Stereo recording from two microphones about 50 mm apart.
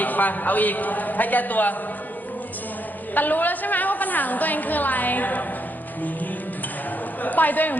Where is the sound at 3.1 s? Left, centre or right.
Left.